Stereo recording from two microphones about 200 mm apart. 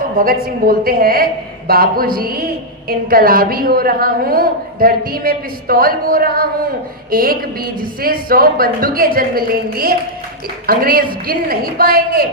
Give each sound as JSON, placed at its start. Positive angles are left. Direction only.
{"t": 0.4, "sound": "a woman's voice", "side_deg": -45}